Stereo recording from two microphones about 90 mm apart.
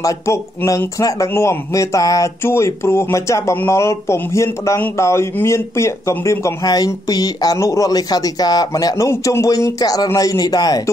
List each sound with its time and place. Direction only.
0.7 s speech: 35° left (ahead or behind)
6.6 s speech: 45° left (ahead or behind)
7.5 s speech: 35° left (ahead or behind)